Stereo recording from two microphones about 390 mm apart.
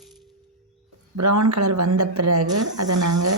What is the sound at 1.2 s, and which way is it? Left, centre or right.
A woman's voice, right.